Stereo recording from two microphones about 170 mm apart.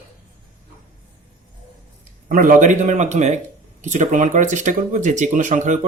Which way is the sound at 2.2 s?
55° right (ahead or behind).